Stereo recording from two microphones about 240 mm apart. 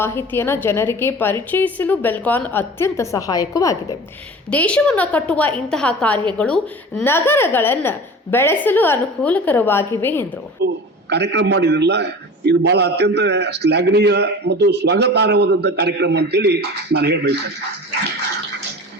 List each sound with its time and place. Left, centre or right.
0.0 s a woman's voice: centre
10.6 s a sound: right
11.1 s a man's voice: right